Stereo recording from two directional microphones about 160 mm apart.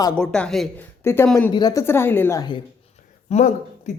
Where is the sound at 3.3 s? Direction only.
45° left (ahead or behind).